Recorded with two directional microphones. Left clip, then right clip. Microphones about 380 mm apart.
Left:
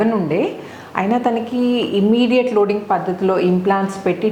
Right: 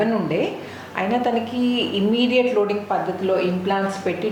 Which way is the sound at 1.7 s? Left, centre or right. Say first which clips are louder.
Left 5 dB; left.